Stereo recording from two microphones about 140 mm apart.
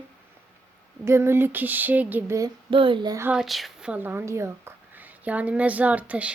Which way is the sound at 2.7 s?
35° right (ahead or behind).